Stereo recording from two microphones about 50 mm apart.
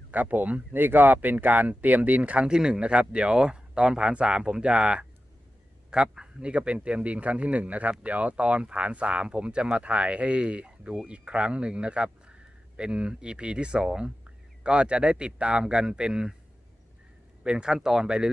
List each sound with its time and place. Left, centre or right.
0.1 s speech: right
2.4 s speech: centre
17.4 s speech: centre